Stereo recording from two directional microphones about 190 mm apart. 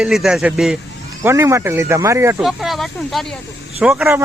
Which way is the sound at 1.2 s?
15° right (ahead or behind).